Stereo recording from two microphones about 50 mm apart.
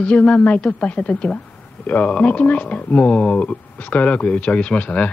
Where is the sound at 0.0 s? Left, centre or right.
Left.